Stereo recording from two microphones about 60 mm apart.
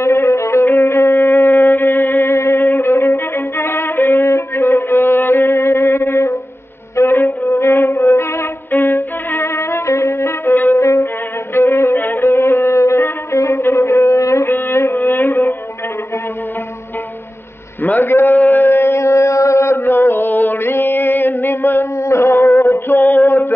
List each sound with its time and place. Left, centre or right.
0.0 s music: left
2.3 s music: left
2.6 s violin: left
7.0 s music: left
8.7 s music: left
14.5 s music: left
17.8 s a sound: left
18.7 s mantra: left
22.0 s a sound: left
23.2 s a sound: left